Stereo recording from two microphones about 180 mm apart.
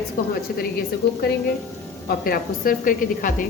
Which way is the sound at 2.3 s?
50° left (ahead or behind).